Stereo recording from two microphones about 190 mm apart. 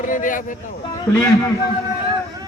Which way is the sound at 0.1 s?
45° left (ahead or behind).